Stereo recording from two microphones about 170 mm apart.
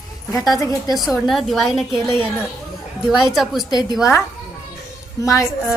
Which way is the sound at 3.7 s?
25° left (ahead or behind).